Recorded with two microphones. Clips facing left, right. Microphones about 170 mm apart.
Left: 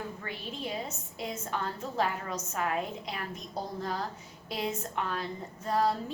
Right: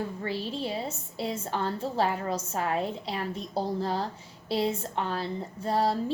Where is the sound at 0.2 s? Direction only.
30° right (ahead or behind).